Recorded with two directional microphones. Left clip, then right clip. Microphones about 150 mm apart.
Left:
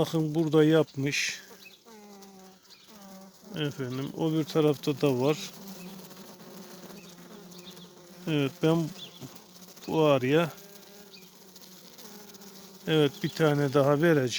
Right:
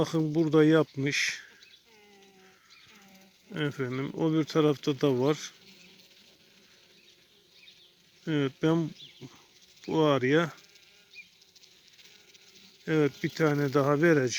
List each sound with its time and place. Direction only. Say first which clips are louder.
0.0 s speech: even; 30° left (ahead or behind)
3.5 s speech: right 1 dB; 15° left (ahead or behind); by 5.5 s 30° left (ahead or behind)
8.2 s speech: left 1 dB; 30° left (ahead or behind)
9.8 s speech: left 1 dB; 35° left (ahead or behind)
12.8 s speech: left 2 dB; 45° left (ahead or behind)